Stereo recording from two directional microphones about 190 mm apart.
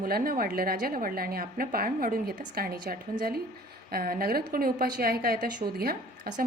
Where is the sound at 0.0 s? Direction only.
50° right (ahead or behind).